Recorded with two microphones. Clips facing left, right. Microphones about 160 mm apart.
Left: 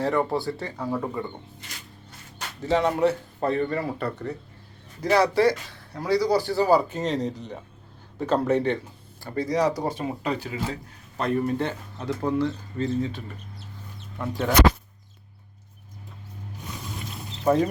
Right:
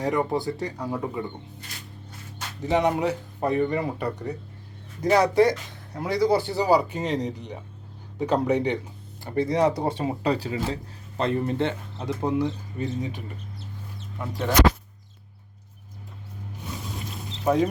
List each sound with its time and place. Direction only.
0.0 s speech: 15° right (ahead or behind)
2.6 s speech: 20° right (ahead or behind)
14.2 s speech: centre (ahead or behind)